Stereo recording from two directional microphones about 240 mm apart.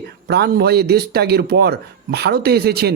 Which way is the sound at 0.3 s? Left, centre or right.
Right.